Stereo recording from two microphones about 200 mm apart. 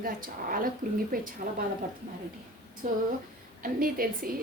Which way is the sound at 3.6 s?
45° right (ahead or behind).